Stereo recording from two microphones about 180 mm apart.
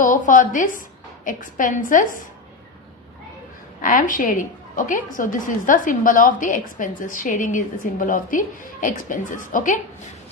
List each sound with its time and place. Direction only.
0.0 s a woman's voice: 45° left (ahead or behind)
3.8 s a woman's voice: 45° left (ahead or behind)